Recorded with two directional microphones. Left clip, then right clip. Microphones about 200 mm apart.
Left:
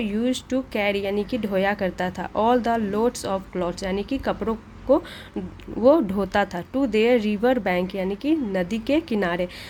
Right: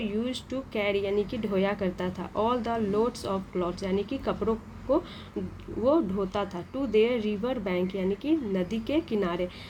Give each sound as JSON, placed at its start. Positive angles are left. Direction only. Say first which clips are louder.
{"t": 0.0, "sound": "speech", "louder": "left 6 dB", "side_deg": 30}